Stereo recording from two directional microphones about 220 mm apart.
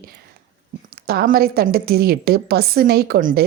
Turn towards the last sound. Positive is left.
turn(degrees=-40)  # may be behind; listen again after turning